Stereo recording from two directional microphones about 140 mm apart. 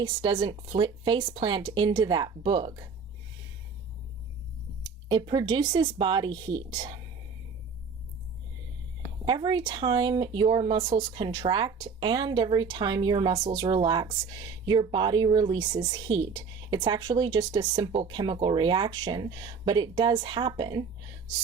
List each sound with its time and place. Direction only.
0.0 s a woman's voice: 35° right (ahead or behind)
5.0 s a woman's voice: 30° right (ahead or behind)
9.2 s a woman's voice: 30° right (ahead or behind)